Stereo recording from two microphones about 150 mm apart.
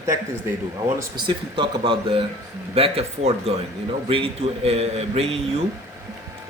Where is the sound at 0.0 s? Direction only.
20° right (ahead or behind).